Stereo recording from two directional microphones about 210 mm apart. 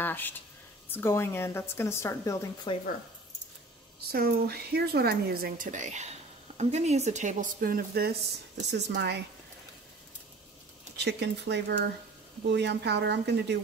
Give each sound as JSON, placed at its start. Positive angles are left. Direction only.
{"t": 0.0, "sound": "a woman's voice", "side_deg": 10}
{"t": 4.1, "sound": "speech", "side_deg": -45}
{"t": 11.0, "sound": "speech", "side_deg": -55}